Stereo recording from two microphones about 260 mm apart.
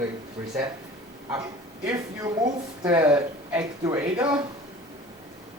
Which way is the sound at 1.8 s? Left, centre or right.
Centre.